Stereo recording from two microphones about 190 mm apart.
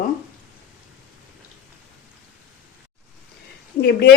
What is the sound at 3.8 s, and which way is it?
Stir, 60° left (ahead or behind).